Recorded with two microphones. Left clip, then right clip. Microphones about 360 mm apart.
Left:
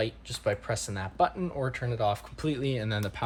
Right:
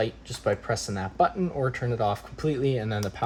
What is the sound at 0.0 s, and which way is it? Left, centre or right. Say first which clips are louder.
Speech: right 3 dB; left.